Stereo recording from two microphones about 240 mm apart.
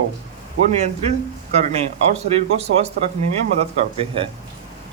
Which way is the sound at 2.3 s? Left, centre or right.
Right.